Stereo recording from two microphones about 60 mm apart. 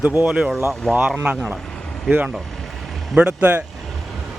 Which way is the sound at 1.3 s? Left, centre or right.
Right.